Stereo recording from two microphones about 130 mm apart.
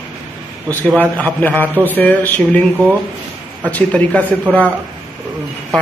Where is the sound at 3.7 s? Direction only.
10° left (ahead or behind).